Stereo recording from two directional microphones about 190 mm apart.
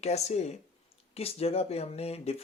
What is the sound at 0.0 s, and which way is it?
Speech, 35° left (ahead or behind).